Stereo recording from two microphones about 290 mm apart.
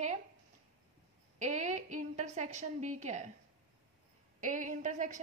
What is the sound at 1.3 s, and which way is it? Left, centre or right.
A woman's voice, right.